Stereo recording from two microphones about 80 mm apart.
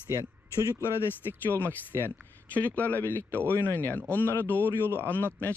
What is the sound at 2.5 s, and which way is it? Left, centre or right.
Speech, centre.